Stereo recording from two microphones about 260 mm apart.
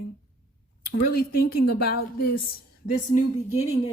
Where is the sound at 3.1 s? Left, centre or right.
Left.